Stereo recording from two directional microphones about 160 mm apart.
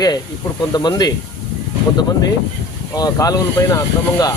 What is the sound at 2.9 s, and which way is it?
Speech, 25° left (ahead or behind).